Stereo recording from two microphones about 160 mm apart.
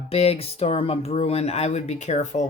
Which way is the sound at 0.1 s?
40° left (ahead or behind).